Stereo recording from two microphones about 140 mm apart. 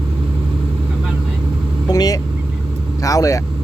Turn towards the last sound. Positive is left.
turn(degrees=25)  # may be behind; listen again after turning